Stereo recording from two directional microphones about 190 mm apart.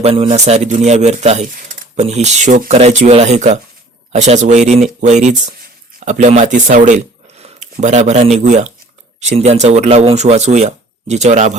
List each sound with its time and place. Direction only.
0.0 s speech: 35° right (ahead or behind)